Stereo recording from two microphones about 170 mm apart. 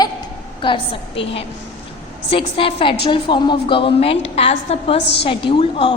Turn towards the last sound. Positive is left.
turn(degrees=30)  # may be behind; listen again after turning